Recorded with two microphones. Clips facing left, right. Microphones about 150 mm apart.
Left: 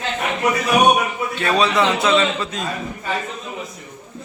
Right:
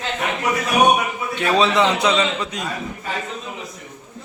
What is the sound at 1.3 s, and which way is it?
A man's voice, 20° right (ahead or behind).